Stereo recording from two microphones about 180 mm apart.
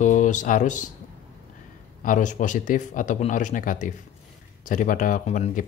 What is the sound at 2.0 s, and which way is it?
Speech, 45° left (ahead or behind).